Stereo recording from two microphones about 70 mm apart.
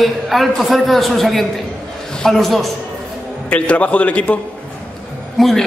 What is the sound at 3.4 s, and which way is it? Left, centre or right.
Speech, centre.